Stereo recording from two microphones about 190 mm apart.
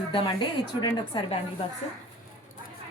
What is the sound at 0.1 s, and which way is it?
A woman's voice, 25° left (ahead or behind).